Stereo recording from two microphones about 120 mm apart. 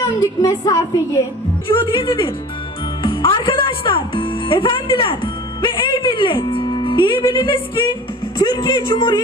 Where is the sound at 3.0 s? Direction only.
45° left (ahead or behind).